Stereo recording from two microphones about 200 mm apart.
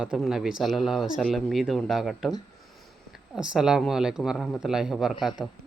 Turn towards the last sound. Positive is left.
turn(degrees=5)  # may be behind; listen again after turning